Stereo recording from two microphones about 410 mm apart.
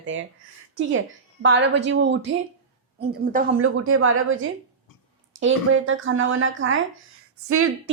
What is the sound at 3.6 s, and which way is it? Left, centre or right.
Speech, right.